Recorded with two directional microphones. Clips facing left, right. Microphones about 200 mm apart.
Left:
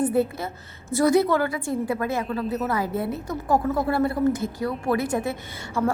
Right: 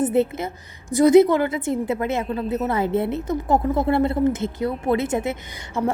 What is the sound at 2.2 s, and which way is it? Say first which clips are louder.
Speech: right 2 dB; 35° right (ahead or behind).